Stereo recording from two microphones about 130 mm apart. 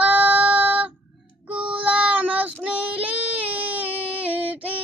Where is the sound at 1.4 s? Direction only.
10° right (ahead or behind).